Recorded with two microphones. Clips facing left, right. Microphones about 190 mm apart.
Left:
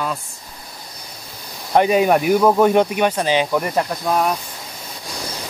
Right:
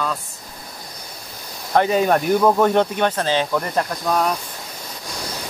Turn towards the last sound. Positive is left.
turn(degrees=5)  # may be behind; listen again after turning